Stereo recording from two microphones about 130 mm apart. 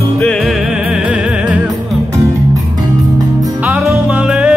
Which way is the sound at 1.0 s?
10° right (ahead or behind).